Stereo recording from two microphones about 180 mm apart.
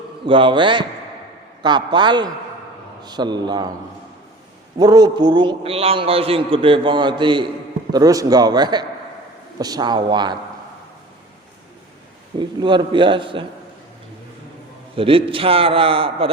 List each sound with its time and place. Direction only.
0.3 s a man's voice: 30° right (ahead or behind)
4.8 s a man's voice: 20° right (ahead or behind)
12.4 s a man's voice: 25° right (ahead or behind)
14.9 s a man's voice: 30° right (ahead or behind)